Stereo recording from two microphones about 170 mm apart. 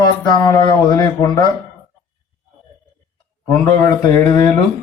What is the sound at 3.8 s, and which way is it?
Speech, 20° left (ahead or behind).